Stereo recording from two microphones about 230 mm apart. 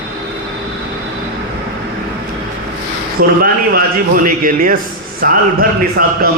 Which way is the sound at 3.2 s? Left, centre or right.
Right.